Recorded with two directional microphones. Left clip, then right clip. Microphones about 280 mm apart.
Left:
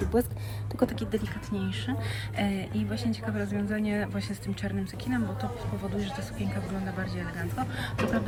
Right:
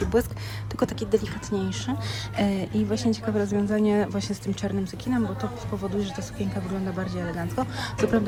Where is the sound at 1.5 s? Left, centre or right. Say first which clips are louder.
Right 6 dB; centre.